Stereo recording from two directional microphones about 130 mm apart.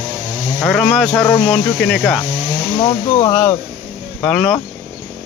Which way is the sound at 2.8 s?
35° left (ahead or behind).